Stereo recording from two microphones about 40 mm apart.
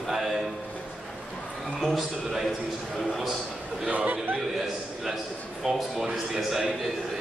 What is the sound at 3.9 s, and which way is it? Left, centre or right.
Speech, right.